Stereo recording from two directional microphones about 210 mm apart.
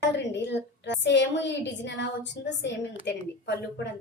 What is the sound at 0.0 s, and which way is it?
A woman's voice, 55° left (ahead or behind).